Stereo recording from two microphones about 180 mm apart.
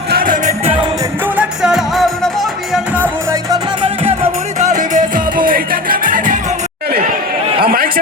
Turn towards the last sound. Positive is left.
turn(degrees=-55)  # may be behind; listen again after turning